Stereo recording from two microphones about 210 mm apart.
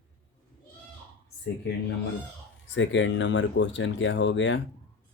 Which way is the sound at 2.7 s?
60° left (ahead or behind).